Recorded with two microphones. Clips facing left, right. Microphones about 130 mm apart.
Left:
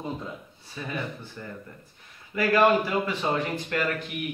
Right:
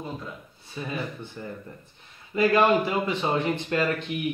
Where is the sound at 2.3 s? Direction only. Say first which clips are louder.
Right 1 dB; 20° right (ahead or behind).